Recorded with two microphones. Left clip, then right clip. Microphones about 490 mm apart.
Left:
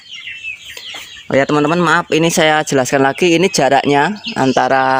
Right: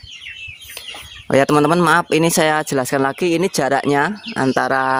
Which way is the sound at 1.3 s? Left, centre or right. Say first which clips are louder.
Left 1 dB; right.